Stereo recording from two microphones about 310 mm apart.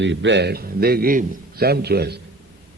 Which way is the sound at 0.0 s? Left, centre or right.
Right.